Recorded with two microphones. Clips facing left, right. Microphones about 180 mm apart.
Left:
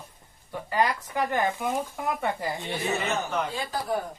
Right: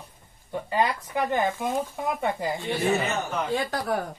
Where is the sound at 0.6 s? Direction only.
20° right (ahead or behind).